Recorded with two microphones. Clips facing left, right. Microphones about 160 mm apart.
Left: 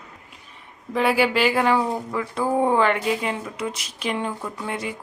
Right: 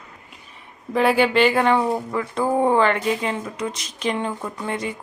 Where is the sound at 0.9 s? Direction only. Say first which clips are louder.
Right 3 dB; centre (ahead or behind).